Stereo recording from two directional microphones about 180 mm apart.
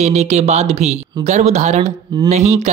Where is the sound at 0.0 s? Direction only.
40° right (ahead or behind).